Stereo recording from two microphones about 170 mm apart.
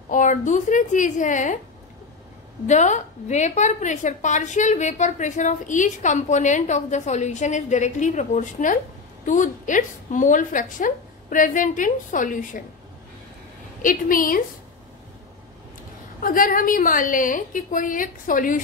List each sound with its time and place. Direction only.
0.1 s a woman's voice: 50° left (ahead or behind)
2.6 s a woman's voice: 45° left (ahead or behind)
13.8 s a woman's voice: 55° left (ahead or behind)
16.2 s a woman's voice: 55° left (ahead or behind)